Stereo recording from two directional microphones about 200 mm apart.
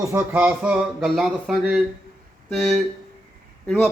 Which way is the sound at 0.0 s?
10° right (ahead or behind).